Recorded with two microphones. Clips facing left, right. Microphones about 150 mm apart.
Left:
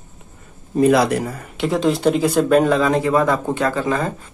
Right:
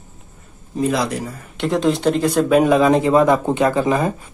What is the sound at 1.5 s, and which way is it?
Speech, centre (ahead or behind).